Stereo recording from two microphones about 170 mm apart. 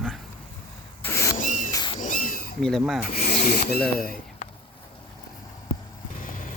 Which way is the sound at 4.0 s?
60° left (ahead or behind).